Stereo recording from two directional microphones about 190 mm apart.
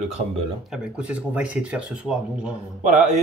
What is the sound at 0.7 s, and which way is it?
Speech, 5° right (ahead or behind).